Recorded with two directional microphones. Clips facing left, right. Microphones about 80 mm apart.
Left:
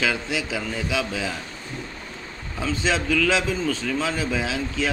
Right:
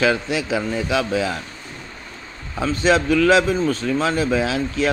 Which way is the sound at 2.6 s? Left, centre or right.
Right.